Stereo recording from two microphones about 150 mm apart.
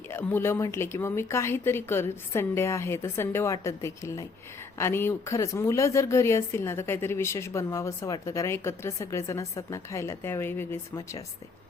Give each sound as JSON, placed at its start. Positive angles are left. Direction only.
{"t": 0.1, "sound": "a woman's voice", "side_deg": 15}